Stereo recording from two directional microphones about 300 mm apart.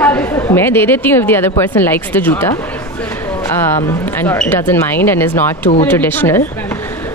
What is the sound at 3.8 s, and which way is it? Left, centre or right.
Speech, centre.